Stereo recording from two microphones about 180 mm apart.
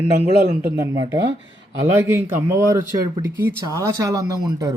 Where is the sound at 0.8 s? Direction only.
15° right (ahead or behind).